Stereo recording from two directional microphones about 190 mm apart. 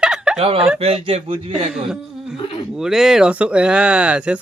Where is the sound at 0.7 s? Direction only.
30° right (ahead or behind).